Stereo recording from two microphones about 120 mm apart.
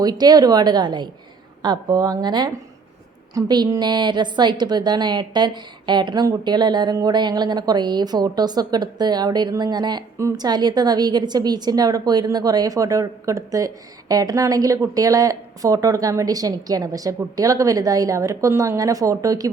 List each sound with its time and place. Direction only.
0.0 s a woman's voice: 35° right (ahead or behind)